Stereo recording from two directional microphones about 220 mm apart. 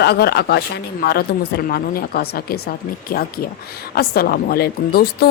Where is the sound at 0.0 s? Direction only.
45° left (ahead or behind).